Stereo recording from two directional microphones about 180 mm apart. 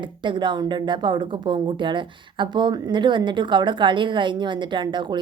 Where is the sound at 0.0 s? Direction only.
25° right (ahead or behind).